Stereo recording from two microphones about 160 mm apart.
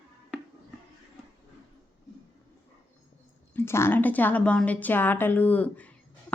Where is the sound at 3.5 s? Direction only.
15° left (ahead or behind).